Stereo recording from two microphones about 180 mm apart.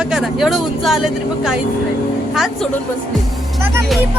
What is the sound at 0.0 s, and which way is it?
Speech, centre (ahead or behind).